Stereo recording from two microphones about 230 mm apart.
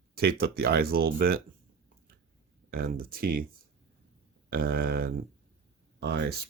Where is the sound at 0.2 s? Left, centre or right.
Right.